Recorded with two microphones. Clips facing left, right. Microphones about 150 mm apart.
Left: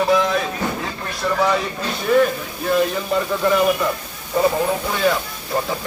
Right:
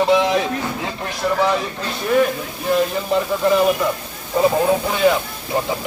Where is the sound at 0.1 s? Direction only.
20° right (ahead or behind).